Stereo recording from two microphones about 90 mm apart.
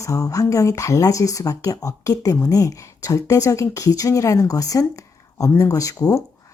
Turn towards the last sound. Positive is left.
turn(degrees=40)  # may be behind; listen again after turning